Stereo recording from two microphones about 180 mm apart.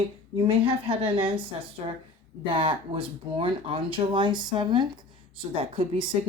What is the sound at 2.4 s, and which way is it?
Speech, 30° right (ahead or behind).